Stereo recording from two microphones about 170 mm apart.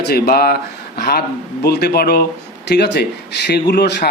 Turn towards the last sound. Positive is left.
turn(degrees=75)  # may be behind; listen again after turning